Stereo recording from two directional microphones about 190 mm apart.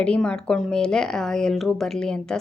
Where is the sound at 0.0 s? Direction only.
5° left (ahead or behind).